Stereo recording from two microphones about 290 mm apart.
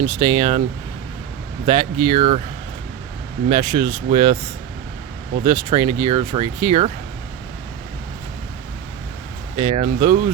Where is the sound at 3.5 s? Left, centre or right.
Centre.